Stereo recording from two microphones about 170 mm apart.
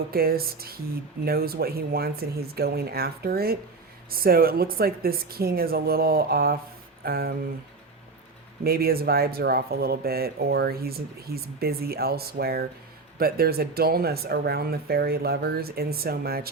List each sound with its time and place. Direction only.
0.1 s speech: 60° right (ahead or behind)
8.6 s speech: 65° right (ahead or behind)